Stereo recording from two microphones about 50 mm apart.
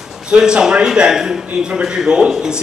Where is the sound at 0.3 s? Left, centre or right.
Centre.